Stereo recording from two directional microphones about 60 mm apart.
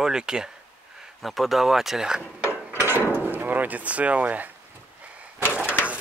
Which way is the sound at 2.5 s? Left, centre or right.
Right.